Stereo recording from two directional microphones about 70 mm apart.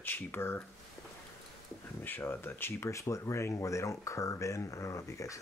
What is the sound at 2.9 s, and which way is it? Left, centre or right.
Speech, left.